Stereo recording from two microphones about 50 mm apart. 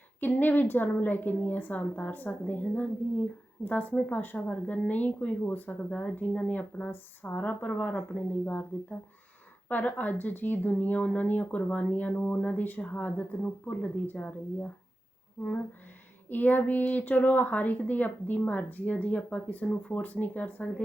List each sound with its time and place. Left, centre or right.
0.2 s speech: left
4.4 s speech: left
16.3 s speech: left